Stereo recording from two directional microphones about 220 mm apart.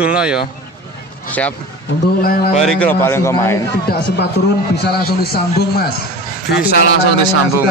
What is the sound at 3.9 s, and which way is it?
A man's voice, 50° left (ahead or behind).